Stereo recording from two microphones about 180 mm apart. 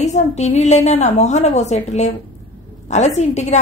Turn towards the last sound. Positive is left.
turn(degrees=40)  # may be behind; listen again after turning